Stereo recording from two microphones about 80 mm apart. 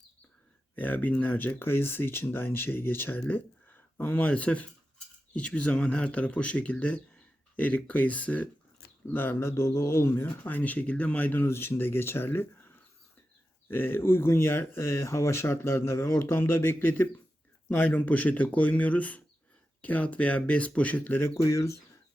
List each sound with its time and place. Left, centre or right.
0.8 s speech: centre
10.2 s speech: left